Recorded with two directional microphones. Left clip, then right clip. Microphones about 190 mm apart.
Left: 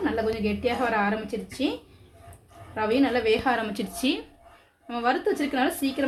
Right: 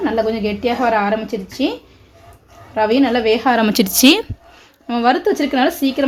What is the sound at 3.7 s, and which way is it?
Speech, 55° right (ahead or behind).